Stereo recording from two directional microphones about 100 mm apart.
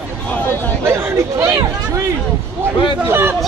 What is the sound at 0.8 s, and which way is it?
Speech, 25° right (ahead or behind).